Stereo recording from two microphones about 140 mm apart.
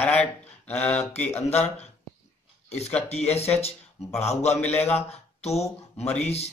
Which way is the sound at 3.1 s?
50° left (ahead or behind).